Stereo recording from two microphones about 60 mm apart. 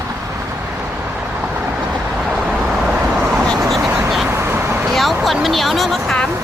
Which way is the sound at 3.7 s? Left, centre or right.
Centre.